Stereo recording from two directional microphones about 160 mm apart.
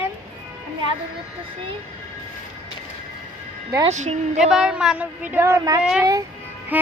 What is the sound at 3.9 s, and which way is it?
Speech, 45° right (ahead or behind).